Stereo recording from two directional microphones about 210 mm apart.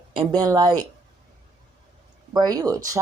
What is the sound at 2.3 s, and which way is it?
Speech, 20° right (ahead or behind).